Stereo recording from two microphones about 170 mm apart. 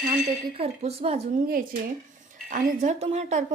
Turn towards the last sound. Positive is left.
turn(degrees=-40)  # may be behind; listen again after turning